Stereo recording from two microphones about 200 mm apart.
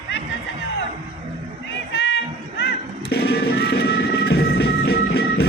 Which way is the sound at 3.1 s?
50° left (ahead or behind).